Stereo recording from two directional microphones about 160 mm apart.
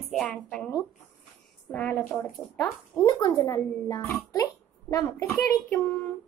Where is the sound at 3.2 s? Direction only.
20° left (ahead or behind).